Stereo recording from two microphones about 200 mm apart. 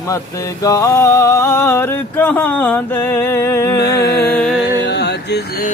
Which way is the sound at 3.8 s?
55° left (ahead or behind).